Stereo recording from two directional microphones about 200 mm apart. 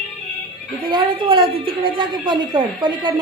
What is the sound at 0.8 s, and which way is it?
A woman's voice, 25° right (ahead or behind).